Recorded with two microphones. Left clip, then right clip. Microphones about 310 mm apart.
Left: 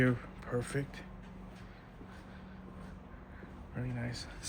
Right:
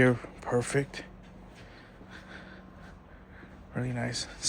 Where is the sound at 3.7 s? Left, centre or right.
Centre.